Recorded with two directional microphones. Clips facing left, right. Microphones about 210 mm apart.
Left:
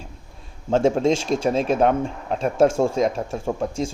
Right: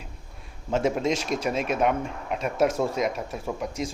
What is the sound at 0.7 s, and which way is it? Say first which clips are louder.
Speech: left 6 dB; 30° left (ahead or behind).